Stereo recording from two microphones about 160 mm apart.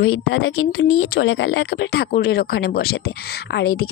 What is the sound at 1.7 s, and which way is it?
Speech, 90° left.